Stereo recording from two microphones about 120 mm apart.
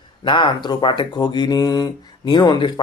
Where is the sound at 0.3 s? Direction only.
40° left (ahead or behind).